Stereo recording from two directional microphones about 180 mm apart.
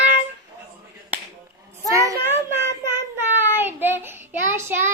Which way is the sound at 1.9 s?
15° right (ahead or behind).